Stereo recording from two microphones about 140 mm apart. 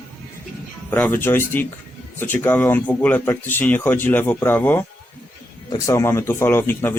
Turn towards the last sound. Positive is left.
turn(degrees=15)  # may be behind; listen again after turning